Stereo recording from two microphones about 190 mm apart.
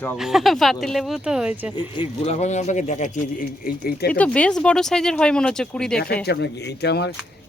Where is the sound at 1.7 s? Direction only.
25° left (ahead or behind); by 4.0 s 50° left (ahead or behind).